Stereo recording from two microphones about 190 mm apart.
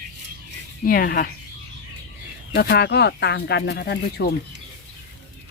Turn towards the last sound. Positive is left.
turn(degrees=60)  # may be behind; listen again after turning